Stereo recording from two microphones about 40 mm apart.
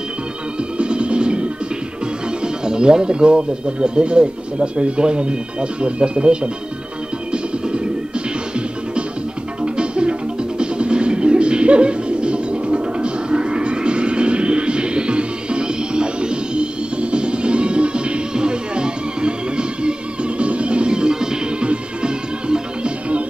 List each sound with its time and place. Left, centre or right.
0.7 s music: right
2.4 s speech: centre
7.6 s music: right
9.6 s music: right